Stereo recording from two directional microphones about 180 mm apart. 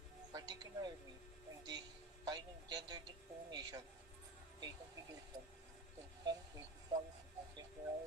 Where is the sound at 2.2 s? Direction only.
25° right (ahead or behind).